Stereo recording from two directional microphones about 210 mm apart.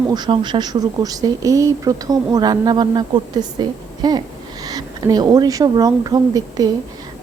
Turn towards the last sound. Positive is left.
turn(degrees=-15)  # may be behind; listen again after turning